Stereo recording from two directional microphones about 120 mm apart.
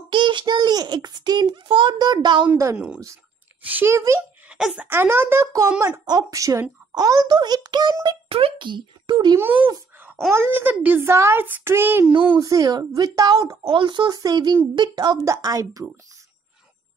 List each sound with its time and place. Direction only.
0.1 s a child's voice: 40° right (ahead or behind)
2.5 s speech: 25° right (ahead or behind)
4.5 s speech: 5° right (ahead or behind)
4.8 s a woman's voice: 20° right (ahead or behind); by 9.4 s 40° right (ahead or behind)
9.9 s wail: 15° right (ahead or behind)
10.3 s a child's voice: 20° right (ahead or behind)
12.4 s a woman's voice: 30° right (ahead or behind)
15.2 s speech: 25° right (ahead or behind)